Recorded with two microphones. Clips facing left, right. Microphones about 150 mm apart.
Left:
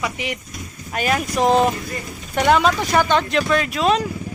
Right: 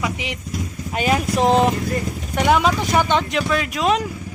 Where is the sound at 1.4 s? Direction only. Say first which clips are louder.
Left 1 dB; 5° left (ahead or behind).